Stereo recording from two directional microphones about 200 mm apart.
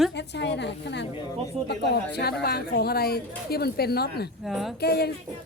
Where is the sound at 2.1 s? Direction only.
50° left (ahead or behind).